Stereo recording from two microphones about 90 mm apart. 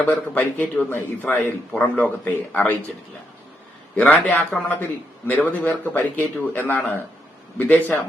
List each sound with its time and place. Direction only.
0.0 s a man's voice: 20° left (ahead or behind)
3.9 s a man's voice: 15° left (ahead or behind)